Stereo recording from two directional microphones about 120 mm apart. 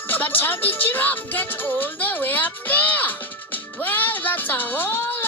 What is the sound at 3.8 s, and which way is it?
Speech, 15° left (ahead or behind).